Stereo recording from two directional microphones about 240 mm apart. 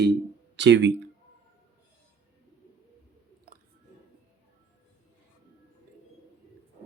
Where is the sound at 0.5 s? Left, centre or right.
Right.